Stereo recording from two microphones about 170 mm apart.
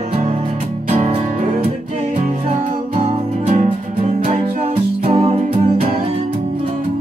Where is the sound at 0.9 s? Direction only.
35° right (ahead or behind).